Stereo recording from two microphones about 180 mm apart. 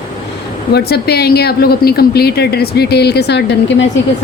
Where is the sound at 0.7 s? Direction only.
65° left (ahead or behind); by 3.9 s 80° left.